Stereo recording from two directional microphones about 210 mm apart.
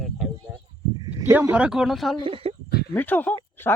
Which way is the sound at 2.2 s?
25° right (ahead or behind).